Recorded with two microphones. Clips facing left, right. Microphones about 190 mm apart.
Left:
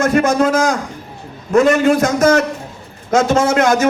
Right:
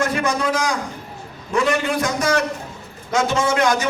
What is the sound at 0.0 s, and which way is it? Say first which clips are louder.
A man's voice: left 7 dB; 45° left (ahead or behind).